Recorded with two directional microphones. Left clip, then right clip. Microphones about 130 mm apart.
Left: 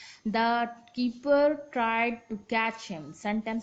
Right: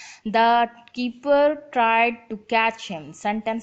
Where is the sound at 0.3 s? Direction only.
35° right (ahead or behind).